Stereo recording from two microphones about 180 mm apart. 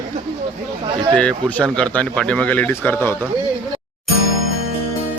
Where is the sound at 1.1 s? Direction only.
5° left (ahead or behind).